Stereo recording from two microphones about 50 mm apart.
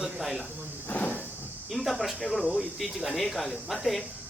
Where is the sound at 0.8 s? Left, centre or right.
Left.